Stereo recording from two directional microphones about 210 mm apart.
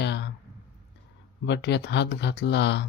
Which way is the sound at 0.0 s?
55° left (ahead or behind).